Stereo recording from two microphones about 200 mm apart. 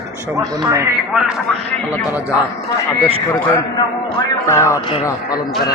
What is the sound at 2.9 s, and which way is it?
Speech, 10° left (ahead or behind).